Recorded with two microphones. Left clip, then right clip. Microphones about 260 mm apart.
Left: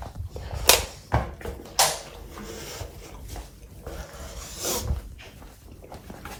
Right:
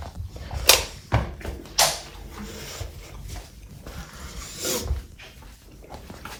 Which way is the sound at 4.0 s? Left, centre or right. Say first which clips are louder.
Even; centre.